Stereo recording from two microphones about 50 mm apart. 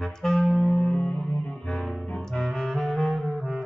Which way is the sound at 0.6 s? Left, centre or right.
Left.